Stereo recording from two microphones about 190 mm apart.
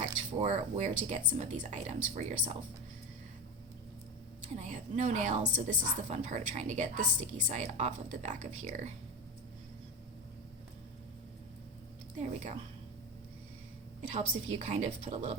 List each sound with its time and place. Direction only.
0.0 s a woman's voice: 35° right (ahead or behind)
4.5 s a woman's voice: 40° right (ahead or behind)
12.1 s a woman's voice: 40° right (ahead or behind)
14.1 s a woman's voice: 30° right (ahead or behind)